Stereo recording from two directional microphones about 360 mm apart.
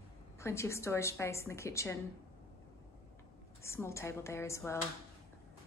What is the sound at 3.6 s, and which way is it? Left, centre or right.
A woman's voice, centre.